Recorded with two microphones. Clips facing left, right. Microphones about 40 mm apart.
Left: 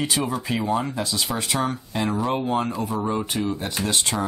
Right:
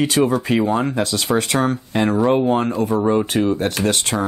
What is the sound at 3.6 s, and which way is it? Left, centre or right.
Speech, right.